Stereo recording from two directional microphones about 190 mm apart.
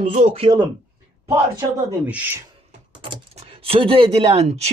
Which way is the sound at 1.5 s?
10° right (ahead or behind).